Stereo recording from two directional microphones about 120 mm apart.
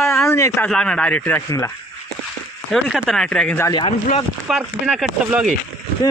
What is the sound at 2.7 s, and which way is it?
Speech, centre (ahead or behind).